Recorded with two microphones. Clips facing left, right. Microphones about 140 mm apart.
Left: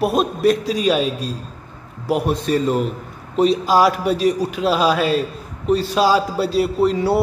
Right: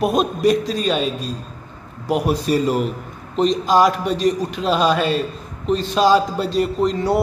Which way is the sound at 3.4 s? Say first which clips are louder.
Left 1 dB; 5° left (ahead or behind).